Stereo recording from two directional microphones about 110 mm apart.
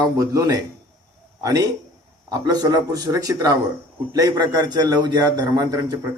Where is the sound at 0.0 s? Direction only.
35° right (ahead or behind).